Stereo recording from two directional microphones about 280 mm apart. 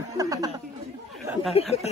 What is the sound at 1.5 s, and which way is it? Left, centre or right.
Speech, left.